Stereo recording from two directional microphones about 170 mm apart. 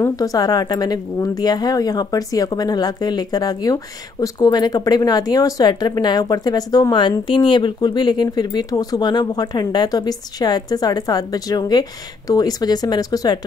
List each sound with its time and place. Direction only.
0.0 s a woman's voice: 20° left (ahead or behind)